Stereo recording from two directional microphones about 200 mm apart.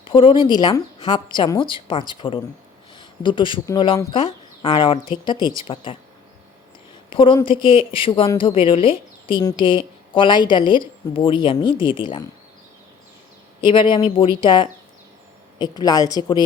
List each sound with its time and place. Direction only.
0.0 s a woman's voice: 25° left (ahead or behind)
7.1 s a woman's voice: 25° left (ahead or behind)
13.6 s a woman's voice: 25° left (ahead or behind)